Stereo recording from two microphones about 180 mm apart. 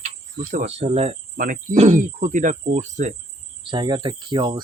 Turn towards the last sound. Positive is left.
turn(degrees=-25)  # may be behind; listen again after turning